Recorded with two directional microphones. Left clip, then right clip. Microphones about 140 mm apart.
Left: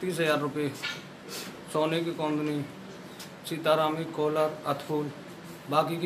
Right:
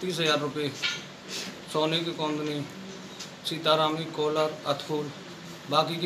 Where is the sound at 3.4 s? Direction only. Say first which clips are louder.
Right 1 dB; 5° left (ahead or behind).